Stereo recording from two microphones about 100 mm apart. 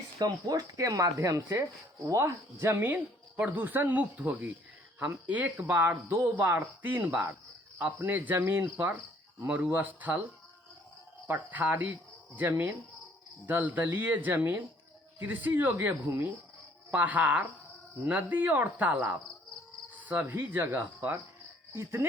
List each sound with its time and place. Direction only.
0.2 s speech: 35° right (ahead or behind); by 10.2 s 15° right (ahead or behind)
11.3 s speech: 15° right (ahead or behind)
19.9 s cricket: 15° right (ahead or behind)
21.7 s speech: 25° right (ahead or behind)